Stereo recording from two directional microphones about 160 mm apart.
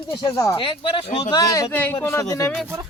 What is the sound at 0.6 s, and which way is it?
Speech, 35° left (ahead or behind).